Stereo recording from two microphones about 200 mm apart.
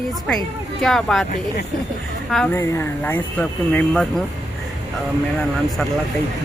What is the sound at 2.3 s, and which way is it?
Speech, 5° left (ahead or behind).